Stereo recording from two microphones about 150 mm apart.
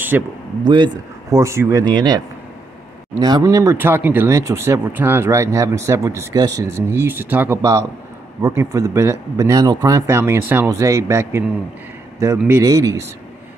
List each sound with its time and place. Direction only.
0.1 s speech: 10° right (ahead or behind)
0.7 s a man's voice: 30° right (ahead or behind)
1.4 s speech: 20° right (ahead or behind)